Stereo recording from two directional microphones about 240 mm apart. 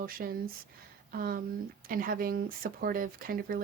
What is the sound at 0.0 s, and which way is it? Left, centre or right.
A woman's voice, right.